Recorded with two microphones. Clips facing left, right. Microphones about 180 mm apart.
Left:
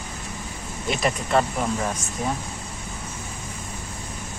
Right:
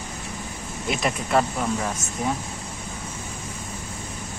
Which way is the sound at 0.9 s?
Centre (ahead or behind).